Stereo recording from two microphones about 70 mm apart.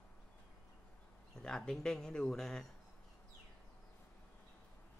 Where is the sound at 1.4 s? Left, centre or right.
Centre.